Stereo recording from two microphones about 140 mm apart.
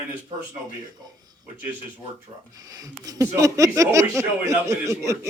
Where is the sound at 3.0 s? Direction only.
25° right (ahead or behind).